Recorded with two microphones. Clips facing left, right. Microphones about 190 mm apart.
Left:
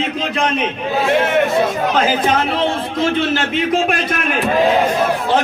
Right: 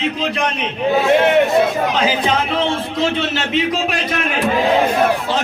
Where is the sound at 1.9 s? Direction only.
50° left (ahead or behind).